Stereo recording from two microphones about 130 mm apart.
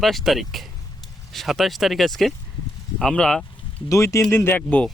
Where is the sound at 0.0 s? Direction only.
Centre (ahead or behind).